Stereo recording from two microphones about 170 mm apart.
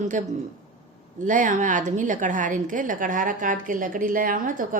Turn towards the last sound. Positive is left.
turn(degrees=-50)  # may be behind; listen again after turning